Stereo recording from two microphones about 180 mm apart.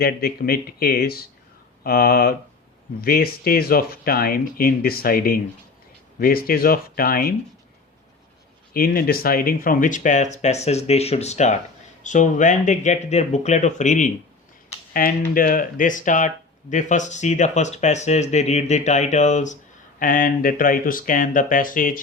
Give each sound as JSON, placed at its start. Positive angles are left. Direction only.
{"t": 0.0, "sound": "speech", "side_deg": 55}
{"t": 8.7, "sound": "speech", "side_deg": 55}